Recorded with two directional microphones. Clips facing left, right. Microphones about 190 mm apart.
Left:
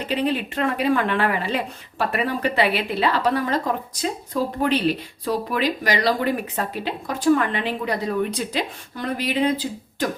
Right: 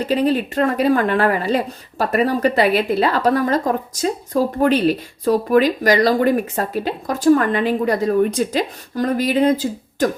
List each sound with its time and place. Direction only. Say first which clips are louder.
0.0 s speech: right 6 dB; 40° right (ahead or behind)